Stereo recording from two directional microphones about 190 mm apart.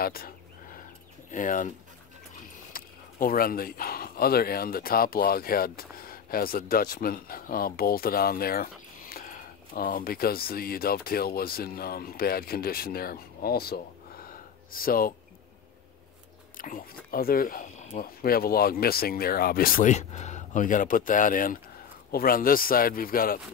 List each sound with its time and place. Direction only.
0.0 s a sound: 50° left (ahead or behind)
1.3 s speech: 45° left (ahead or behind)
2.7 s speech: 50° left (ahead or behind)
16.5 s speech: 45° left (ahead or behind)